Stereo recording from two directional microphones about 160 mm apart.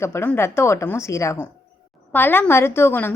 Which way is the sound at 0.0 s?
15° left (ahead or behind).